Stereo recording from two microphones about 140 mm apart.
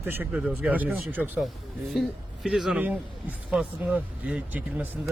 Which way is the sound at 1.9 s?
Centre (ahead or behind).